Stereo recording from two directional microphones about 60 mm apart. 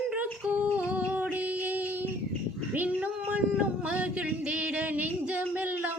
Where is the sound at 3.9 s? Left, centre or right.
Right.